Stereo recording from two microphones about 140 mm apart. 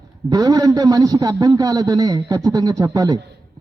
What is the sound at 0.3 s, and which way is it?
A man's voice, 25° right (ahead or behind).